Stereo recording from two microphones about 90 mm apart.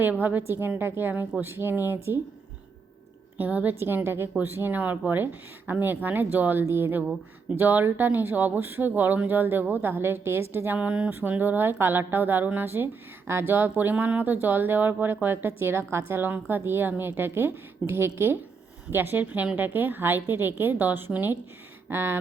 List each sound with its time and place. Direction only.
0.0 s speech: 20° right (ahead or behind)
3.3 s speech: 20° right (ahead or behind)